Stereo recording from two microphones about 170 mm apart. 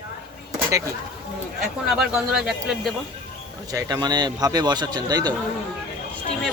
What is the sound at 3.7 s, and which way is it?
A man's voice, 20° right (ahead or behind).